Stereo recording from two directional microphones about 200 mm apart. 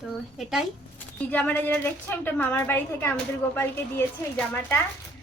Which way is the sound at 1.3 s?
10° left (ahead or behind).